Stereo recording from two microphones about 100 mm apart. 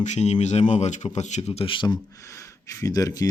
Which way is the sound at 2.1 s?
30° left (ahead or behind).